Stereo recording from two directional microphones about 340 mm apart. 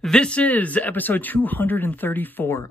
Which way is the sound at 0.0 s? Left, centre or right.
Centre.